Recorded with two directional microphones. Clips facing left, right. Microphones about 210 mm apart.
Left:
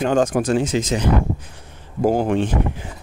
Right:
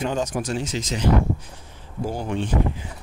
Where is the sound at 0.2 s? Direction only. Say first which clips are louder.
Left 8 dB; 55° left (ahead or behind).